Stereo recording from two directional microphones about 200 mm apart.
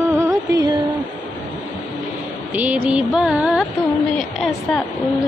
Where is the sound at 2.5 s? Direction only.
10° right (ahead or behind).